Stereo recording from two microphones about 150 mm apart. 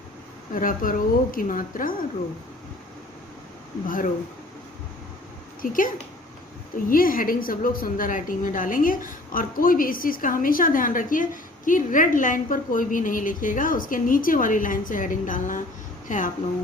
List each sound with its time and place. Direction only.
0.5 s a woman's voice: 65° left (ahead or behind)
3.8 s a woman's voice: 65° left (ahead or behind)
5.6 s a woman's voice: 65° left (ahead or behind)
6.9 s a woman's voice: 70° left (ahead or behind)